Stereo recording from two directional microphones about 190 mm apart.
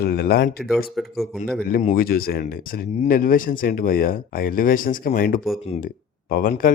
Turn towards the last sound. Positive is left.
turn(degrees=45)  # may be behind; listen again after turning